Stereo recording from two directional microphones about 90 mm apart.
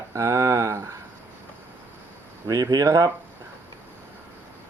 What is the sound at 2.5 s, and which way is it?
Speech, 45° right (ahead or behind).